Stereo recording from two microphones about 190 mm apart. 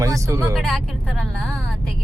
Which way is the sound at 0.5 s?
Centre (ahead or behind).